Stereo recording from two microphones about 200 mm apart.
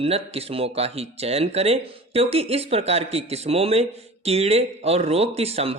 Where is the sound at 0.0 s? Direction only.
30° right (ahead or behind).